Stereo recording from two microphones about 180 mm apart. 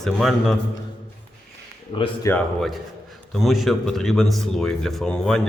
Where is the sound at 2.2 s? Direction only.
5° left (ahead or behind).